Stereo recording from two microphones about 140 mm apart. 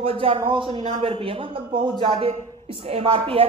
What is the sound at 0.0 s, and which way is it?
A man's voice, 40° right (ahead or behind).